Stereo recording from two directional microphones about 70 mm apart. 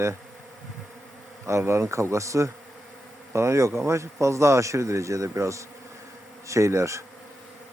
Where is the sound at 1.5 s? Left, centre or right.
Right.